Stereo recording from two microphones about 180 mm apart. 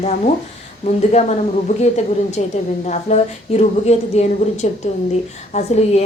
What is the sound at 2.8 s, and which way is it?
A woman's voice, 40° left (ahead or behind).